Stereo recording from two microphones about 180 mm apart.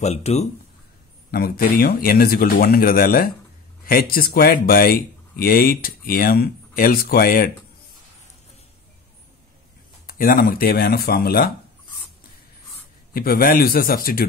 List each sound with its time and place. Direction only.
0.0 s speech: 35° left (ahead or behind)
1.3 s speech: 55° left (ahead or behind)
10.0 s speech: 50° left (ahead or behind)
13.1 s speech: 55° left (ahead or behind)